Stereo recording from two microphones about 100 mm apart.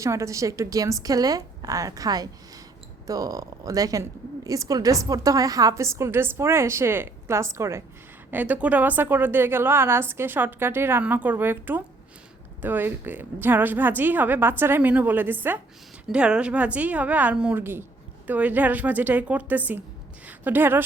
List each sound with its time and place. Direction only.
0.0 s a woman's voice: 30° right (ahead or behind)
8.3 s a woman's voice: 15° right (ahead or behind)
16.0 s a woman's voice: 10° right (ahead or behind)
17.6 s a woman's voice: 20° right (ahead or behind)